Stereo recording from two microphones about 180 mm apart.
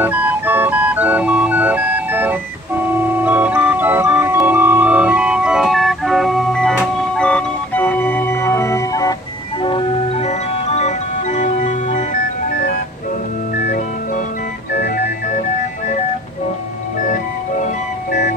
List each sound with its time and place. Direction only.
0.0 s music: 10° right (ahead or behind)
3.3 s organ: 10° right (ahead or behind); by 9.1 s 20° left (ahead or behind)
9.6 s music: 30° left (ahead or behind)